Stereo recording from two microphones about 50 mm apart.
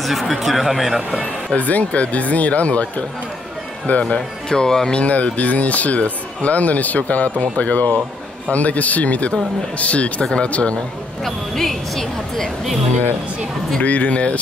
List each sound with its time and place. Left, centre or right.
0.0 s speech: centre
1.1 s speech: left
4.5 s speech: centre
5.0 s speech: left
11.2 s speech: centre
13.8 s speech: left